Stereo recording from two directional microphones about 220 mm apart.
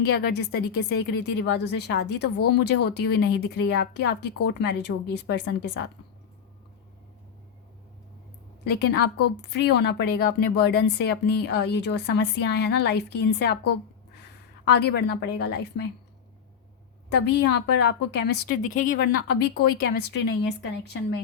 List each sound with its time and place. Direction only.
0.1 s a woman's voice: 50° left (ahead or behind)
8.6 s a woman's voice: 45° left (ahead or behind)
17.1 s a woman's voice: 50° left (ahead or behind)